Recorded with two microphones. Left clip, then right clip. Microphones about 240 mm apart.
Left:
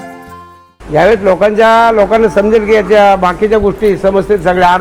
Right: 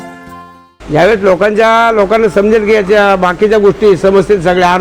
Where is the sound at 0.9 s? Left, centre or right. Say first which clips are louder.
Even; right.